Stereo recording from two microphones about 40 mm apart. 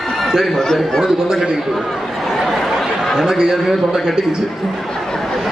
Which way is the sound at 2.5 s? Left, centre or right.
Centre.